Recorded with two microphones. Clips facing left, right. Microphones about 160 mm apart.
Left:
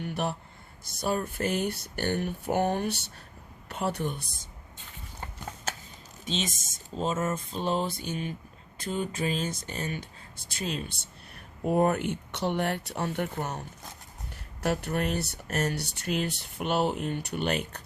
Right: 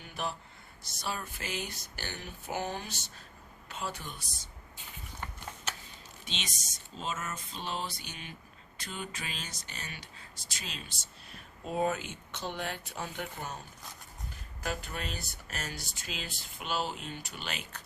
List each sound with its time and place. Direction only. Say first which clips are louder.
0.0 s a sound: left 7 dB; 65° left (ahead or behind)
1.0 s a woman's voice: left 10 dB; 50° left (ahead or behind)
6.2 s speech: left 10 dB; 45° left (ahead or behind)
11.6 s speech: left 7 dB; 60° left (ahead or behind)